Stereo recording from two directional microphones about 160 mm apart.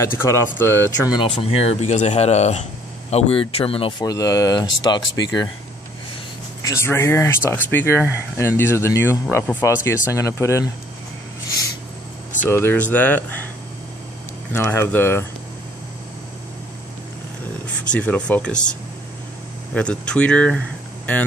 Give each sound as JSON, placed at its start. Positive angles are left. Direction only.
{"t": 0.0, "sound": "speech", "side_deg": 15}
{"t": 1.1, "sound": "speech", "side_deg": 35}
{"t": 4.0, "sound": "speech", "side_deg": 20}
{"t": 6.6, "sound": "speech", "side_deg": 15}
{"t": 12.4, "sound": "speech", "side_deg": 15}
{"t": 14.5, "sound": "speech", "side_deg": 15}
{"t": 17.9, "sound": "speech", "side_deg": 10}